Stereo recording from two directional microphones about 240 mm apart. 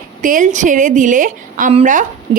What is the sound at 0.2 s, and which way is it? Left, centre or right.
A woman's voice, right.